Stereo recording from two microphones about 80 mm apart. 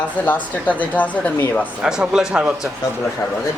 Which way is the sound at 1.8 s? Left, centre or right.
Centre.